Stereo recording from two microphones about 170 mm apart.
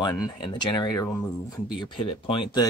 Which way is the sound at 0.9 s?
10° left (ahead or behind).